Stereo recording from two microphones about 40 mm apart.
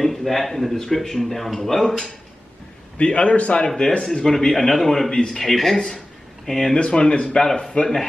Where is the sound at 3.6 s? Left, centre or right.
Centre.